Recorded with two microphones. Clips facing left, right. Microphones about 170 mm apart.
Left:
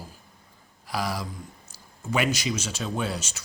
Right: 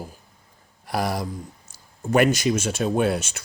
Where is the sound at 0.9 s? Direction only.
55° right (ahead or behind).